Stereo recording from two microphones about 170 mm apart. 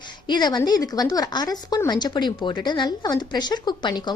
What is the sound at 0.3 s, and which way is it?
A woman's voice, 25° left (ahead or behind).